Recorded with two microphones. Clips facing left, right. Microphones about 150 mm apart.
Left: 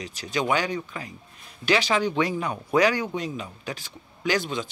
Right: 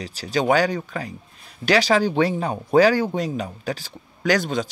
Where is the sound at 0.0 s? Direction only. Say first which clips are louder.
Right 5 dB; 35° right (ahead or behind).